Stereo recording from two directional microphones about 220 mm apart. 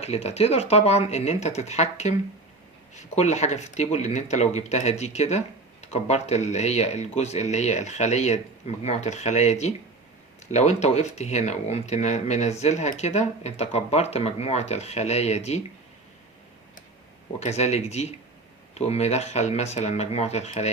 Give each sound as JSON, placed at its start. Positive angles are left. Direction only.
{"t": 0.0, "sound": "speech", "side_deg": 30}
{"t": 17.4, "sound": "speech", "side_deg": 30}